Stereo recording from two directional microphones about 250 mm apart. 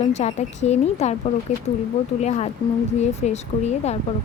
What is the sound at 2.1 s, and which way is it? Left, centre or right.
Speech, left.